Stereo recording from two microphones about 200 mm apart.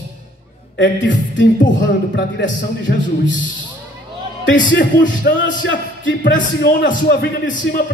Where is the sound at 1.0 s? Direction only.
65° left (ahead or behind).